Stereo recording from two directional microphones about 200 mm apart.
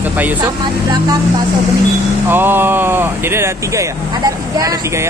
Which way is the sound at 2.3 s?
10° right (ahead or behind).